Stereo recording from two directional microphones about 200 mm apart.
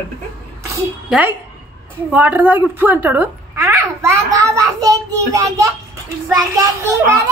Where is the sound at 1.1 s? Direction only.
10° right (ahead or behind).